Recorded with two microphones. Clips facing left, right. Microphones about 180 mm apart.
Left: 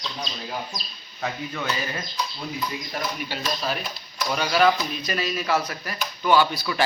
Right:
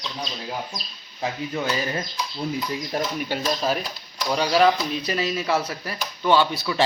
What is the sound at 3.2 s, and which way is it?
Speech, 45° right (ahead or behind).